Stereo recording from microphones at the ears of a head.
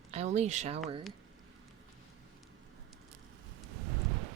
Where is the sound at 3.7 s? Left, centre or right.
Right.